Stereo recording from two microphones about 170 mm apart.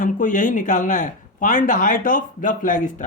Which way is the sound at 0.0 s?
50° left (ahead or behind).